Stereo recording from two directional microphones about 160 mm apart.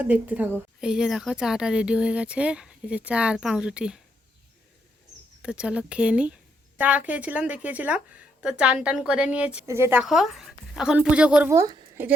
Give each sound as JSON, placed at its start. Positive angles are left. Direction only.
{"t": 0.0, "sound": "a woman's voice", "side_deg": -10}
{"t": 5.4, "sound": "a woman's voice", "side_deg": -5}
{"t": 10.0, "sound": "speech", "side_deg": 0}
{"t": 11.5, "sound": "a woman's voice", "side_deg": -20}